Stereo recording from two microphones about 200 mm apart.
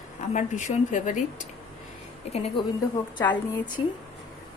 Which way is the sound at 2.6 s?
25° left (ahead or behind).